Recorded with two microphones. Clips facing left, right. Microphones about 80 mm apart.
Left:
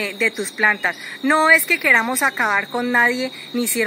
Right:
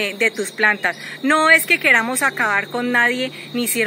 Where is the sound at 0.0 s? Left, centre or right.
Centre.